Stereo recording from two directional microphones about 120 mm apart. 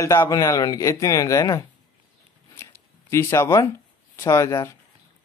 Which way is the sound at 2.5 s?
25° left (ahead or behind).